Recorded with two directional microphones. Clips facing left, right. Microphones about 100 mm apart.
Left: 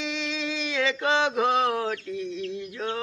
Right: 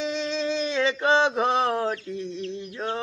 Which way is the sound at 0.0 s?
40° right (ahead or behind).